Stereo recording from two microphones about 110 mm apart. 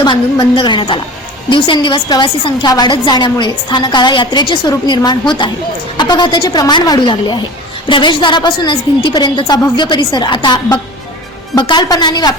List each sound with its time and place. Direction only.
0.0 s a woman's voice: 40° left (ahead or behind)